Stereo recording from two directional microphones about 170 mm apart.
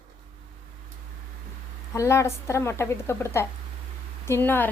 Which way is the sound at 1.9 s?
20° left (ahead or behind).